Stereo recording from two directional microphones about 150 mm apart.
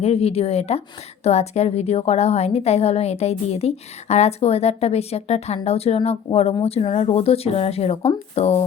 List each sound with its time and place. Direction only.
0.0 s speech: 40° left (ahead or behind)